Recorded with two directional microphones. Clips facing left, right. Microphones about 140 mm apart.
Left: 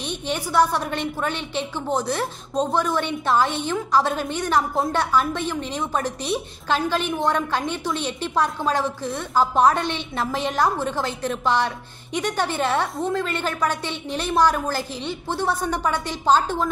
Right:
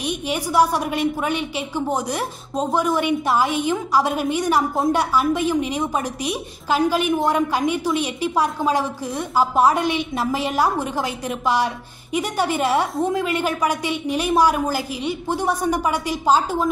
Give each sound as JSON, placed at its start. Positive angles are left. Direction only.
{"t": 0.0, "sound": "a woman's voice", "side_deg": -10}